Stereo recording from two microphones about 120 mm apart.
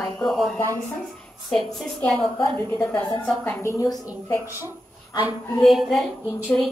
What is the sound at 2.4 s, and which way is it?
A woman's voice, 15° left (ahead or behind).